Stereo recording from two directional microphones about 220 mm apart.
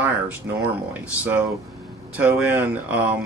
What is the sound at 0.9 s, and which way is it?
Speech, 10° right (ahead or behind).